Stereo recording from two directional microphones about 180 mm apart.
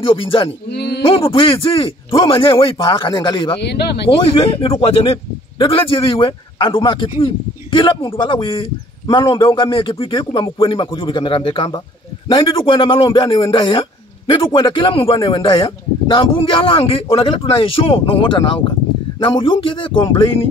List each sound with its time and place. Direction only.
0.0 s a man's voice: 30° left (ahead or behind)
0.7 s speech: 65° left (ahead or behind)
1.0 s a man's voice: 30° left (ahead or behind)
3.6 s speech: 65° left (ahead or behind)
4.3 s a man's voice: 35° left (ahead or behind)